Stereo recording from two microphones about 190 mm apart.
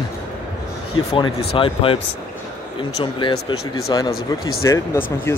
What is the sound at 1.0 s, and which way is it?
Speech, 90° left.